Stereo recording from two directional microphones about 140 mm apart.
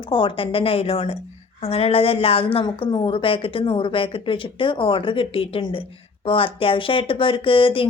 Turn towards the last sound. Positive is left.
turn(degrees=40)  # may be behind; listen again after turning